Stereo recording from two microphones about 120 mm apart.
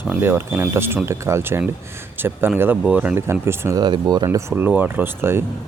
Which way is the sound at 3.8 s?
35° right (ahead or behind).